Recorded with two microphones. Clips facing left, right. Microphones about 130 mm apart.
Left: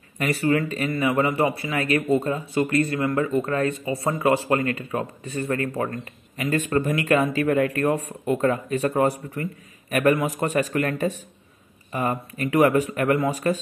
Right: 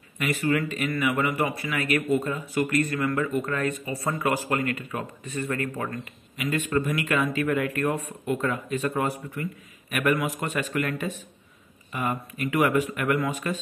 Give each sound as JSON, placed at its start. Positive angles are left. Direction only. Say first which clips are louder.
{"t": 0.2, "sound": "speech", "louder": "left 3 dB", "side_deg": 35}